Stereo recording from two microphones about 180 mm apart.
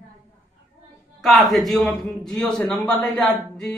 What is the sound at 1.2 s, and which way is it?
A man's voice, centre (ahead or behind).